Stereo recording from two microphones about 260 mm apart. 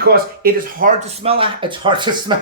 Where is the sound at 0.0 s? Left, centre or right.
Right.